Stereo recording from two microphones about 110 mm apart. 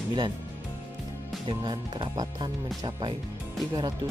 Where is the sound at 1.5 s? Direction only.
40° right (ahead or behind).